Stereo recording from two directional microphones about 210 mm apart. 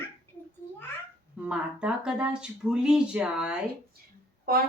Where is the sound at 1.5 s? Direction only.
5° right (ahead or behind).